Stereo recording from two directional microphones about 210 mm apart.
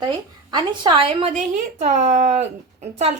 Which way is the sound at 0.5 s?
20° right (ahead or behind).